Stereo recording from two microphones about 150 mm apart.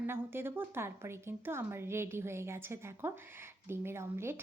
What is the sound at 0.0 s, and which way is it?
A woman's voice, 15° right (ahead or behind).